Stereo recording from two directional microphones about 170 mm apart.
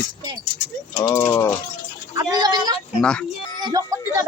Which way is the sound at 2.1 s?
25° right (ahead or behind).